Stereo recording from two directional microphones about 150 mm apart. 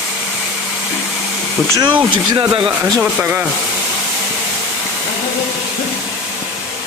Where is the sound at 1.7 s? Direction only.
30° right (ahead or behind).